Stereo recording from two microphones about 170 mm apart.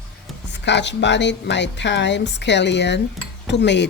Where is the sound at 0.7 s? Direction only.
90° left.